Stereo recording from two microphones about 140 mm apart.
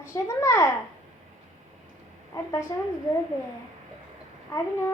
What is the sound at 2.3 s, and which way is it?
Speech, 20° left (ahead or behind).